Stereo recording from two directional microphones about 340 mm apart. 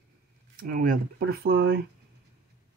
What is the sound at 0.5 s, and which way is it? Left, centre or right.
Speech, right.